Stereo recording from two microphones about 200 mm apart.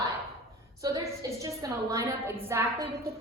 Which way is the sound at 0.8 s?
15° right (ahead or behind).